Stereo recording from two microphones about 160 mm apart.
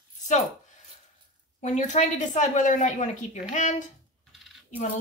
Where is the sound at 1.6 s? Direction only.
50° left (ahead or behind).